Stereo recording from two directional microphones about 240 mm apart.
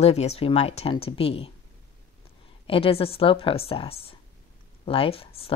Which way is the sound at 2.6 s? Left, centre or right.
Left.